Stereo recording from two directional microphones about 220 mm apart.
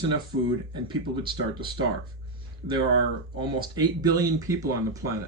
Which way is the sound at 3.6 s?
20° right (ahead or behind).